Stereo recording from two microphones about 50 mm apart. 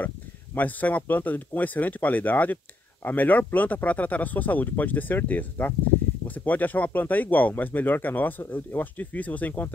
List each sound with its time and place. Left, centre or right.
0.6 s speech: left